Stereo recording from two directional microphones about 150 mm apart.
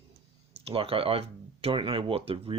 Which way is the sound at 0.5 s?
40° right (ahead or behind).